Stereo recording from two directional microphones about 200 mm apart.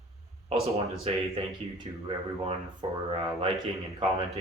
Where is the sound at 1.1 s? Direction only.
30° right (ahead or behind).